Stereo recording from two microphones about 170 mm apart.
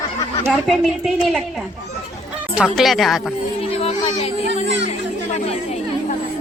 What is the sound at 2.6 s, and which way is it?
Speech, centre (ahead or behind).